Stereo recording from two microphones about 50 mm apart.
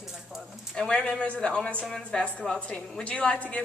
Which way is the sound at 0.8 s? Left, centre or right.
Left.